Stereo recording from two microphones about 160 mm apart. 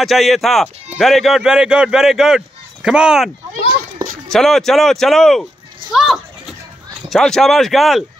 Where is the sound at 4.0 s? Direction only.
25° right (ahead or behind).